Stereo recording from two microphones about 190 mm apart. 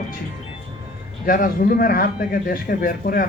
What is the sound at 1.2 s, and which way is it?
A man's voice, 45° left (ahead or behind).